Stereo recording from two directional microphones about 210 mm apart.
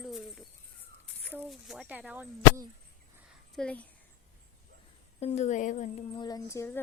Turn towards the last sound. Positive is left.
turn(degrees=10)  # may be behind; listen again after turning